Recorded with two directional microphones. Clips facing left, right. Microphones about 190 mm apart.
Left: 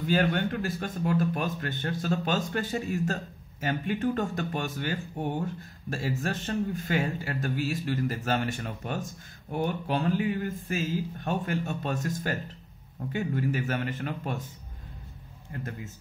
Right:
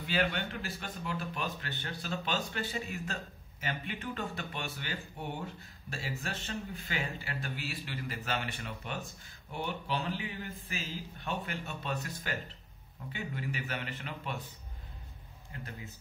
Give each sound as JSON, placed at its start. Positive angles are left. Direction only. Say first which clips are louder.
{"t": 0.0, "sound": "speech", "louder": "left 7 dB", "side_deg": 45}